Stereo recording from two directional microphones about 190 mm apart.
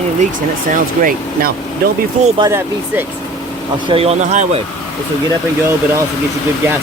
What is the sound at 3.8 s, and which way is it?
Speech, 30° right (ahead or behind).